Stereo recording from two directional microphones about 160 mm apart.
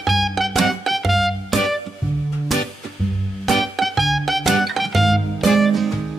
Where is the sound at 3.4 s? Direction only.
Centre (ahead or behind).